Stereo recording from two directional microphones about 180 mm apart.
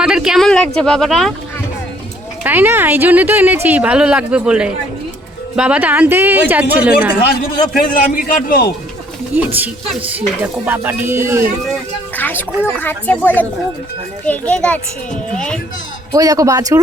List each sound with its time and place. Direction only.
0.0 s speech: 5° right (ahead or behind)
2.4 s speech: 10° right (ahead or behind)
7.4 s a man's voice: 55° left (ahead or behind)
9.3 s speech: 10° right (ahead or behind)
12.1 s speech: 10° left (ahead or behind)
16.1 s speech: 20° right (ahead or behind)